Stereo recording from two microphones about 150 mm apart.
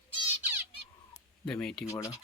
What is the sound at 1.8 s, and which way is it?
Speech, 20° left (ahead or behind).